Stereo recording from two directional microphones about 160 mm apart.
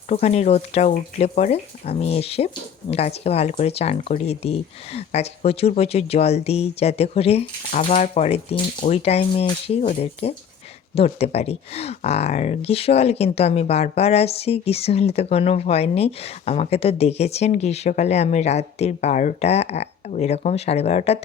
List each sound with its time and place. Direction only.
0.1 s speech: 45° left (ahead or behind)